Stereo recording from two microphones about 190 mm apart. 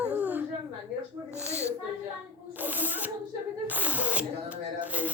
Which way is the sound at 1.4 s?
35° right (ahead or behind).